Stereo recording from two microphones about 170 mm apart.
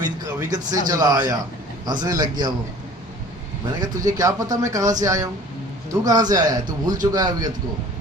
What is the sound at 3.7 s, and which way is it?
A man's voice, 20° right (ahead or behind).